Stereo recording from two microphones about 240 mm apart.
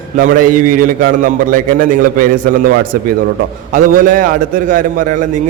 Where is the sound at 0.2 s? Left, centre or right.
Right.